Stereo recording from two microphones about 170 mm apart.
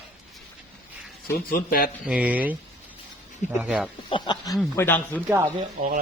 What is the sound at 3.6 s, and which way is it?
Speech, 10° right (ahead or behind).